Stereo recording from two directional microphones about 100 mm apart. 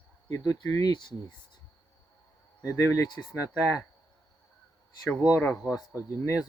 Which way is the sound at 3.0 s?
45° left (ahead or behind).